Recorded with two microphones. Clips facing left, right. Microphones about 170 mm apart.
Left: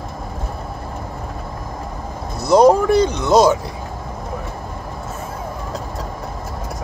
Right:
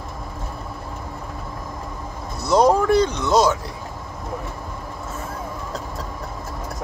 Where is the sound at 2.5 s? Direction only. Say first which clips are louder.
Left 4 dB; 15° left (ahead or behind).